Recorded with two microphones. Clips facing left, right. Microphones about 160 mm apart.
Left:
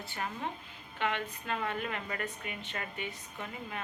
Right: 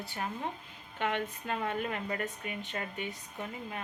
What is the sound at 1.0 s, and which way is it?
Speech, 45° right (ahead or behind).